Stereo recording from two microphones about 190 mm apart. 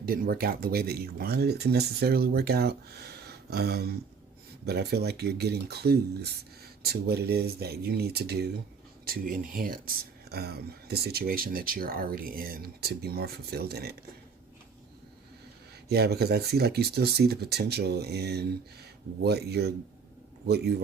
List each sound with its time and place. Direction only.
0.0 s speech: 50° right (ahead or behind)
15.9 s speech: 60° right (ahead or behind)